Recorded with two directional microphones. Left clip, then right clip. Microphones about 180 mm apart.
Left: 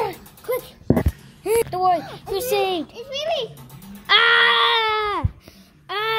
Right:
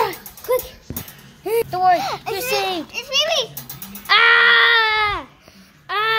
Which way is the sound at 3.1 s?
70° right (ahead or behind).